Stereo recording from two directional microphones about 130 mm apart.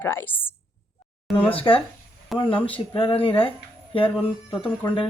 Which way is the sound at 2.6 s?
40° left (ahead or behind).